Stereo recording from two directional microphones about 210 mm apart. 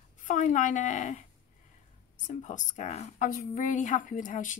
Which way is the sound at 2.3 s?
35° left (ahead or behind).